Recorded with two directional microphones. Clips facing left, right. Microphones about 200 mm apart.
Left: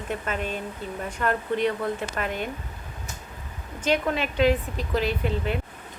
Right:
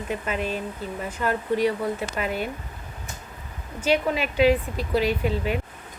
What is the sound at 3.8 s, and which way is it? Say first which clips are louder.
Speech: right 2 dB; 10° right (ahead or behind).